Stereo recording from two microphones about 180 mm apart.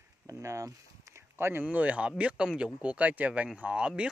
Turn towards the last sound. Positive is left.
turn(degrees=-5)  # may be behind; listen again after turning